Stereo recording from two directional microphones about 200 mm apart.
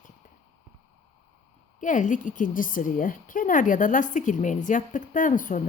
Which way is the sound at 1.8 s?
40° left (ahead or behind).